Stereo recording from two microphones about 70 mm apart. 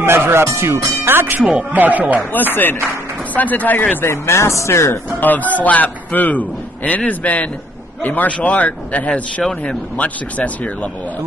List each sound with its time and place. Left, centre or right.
0.0 s speech: right
1.5 s speech: right
2.5 s a man's voice: left
4.1 s speech: left
5.2 s a man's voice: left
9.4 s speech: centre
9.9 s a man's voice: left